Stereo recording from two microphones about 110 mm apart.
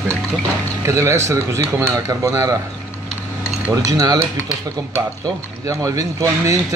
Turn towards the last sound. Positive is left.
turn(degrees=-30)  # may be behind; listen again after turning